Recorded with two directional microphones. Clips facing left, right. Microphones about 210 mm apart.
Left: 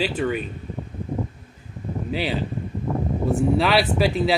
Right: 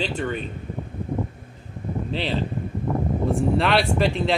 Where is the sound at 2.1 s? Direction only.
10° left (ahead or behind).